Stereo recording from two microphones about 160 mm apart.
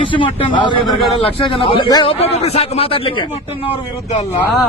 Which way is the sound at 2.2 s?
40° left (ahead or behind).